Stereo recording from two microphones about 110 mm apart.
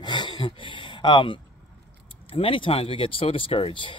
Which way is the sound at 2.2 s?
55° left (ahead or behind).